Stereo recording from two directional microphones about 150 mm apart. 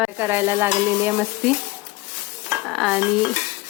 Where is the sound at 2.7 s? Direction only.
Centre (ahead or behind).